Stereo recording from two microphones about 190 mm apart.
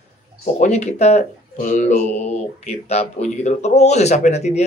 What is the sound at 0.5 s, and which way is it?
Speech, 40° left (ahead or behind).